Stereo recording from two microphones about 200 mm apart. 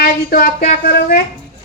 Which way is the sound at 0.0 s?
50° left (ahead or behind).